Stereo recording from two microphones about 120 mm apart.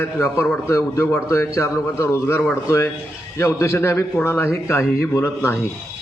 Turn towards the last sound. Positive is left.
turn(degrees=20)  # may be behind; listen again after turning